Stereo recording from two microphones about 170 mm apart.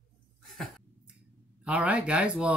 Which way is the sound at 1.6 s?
10° right (ahead or behind).